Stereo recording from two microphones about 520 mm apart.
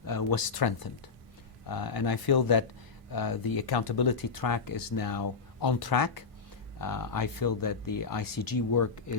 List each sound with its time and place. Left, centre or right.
0.0 s speech: left